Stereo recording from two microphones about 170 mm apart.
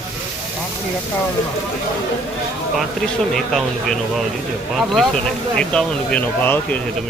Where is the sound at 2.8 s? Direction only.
Centre (ahead or behind).